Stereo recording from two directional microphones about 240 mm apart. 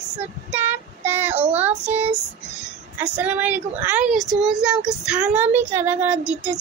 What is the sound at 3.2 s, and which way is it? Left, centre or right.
Speech, centre.